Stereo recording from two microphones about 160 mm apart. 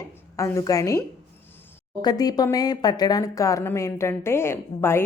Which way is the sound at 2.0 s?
25° left (ahead or behind).